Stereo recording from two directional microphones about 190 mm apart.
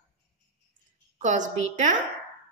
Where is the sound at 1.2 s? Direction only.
40° right (ahead or behind).